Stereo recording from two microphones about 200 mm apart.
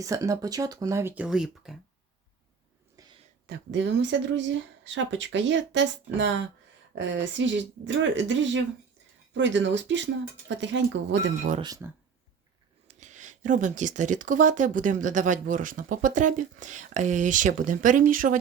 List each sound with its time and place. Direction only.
0.0 s speech: 15° right (ahead or behind)
3.0 s a sound: 15° right (ahead or behind)
3.4 s speech: 65° right (ahead or behind)
11.6 s speech: 15° right (ahead or behind)
12.9 s speech: 35° right (ahead or behind)